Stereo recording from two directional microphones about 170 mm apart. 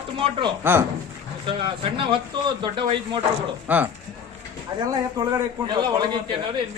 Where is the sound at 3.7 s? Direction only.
10° right (ahead or behind).